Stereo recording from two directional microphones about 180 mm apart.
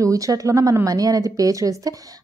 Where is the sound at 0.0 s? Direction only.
20° right (ahead or behind).